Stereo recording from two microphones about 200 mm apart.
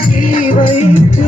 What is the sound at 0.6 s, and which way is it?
Music, 40° left (ahead or behind).